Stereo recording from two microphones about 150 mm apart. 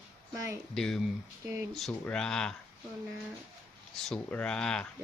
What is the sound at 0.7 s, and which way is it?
Speech, 5° left (ahead or behind).